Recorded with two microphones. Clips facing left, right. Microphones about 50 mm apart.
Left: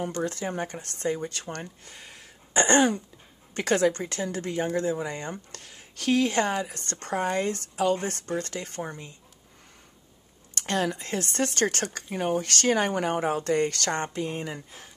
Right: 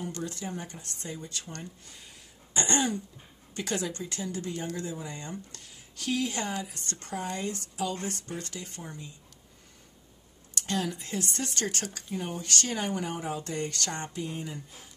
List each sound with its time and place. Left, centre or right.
0.0 s speech: left
10.5 s speech: left